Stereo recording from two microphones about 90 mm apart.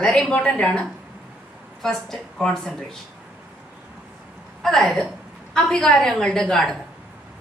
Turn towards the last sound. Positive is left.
turn(degrees=5)  # may be behind; listen again after turning